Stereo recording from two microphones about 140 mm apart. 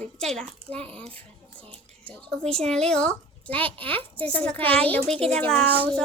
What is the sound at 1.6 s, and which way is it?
Music, 10° left (ahead or behind).